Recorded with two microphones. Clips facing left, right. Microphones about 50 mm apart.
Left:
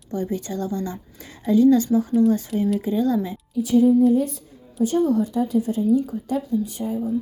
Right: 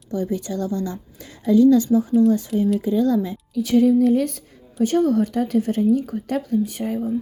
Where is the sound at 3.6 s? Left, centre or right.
Right.